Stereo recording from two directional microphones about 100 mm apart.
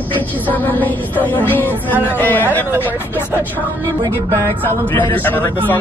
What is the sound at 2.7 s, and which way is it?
Speech, 20° right (ahead or behind).